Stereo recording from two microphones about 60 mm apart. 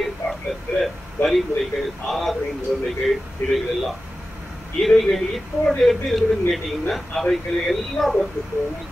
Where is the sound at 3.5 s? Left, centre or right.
Centre.